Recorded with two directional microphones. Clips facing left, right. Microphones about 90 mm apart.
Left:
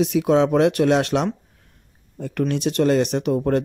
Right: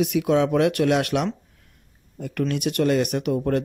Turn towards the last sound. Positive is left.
turn(degrees=25)  # may be behind; listen again after turning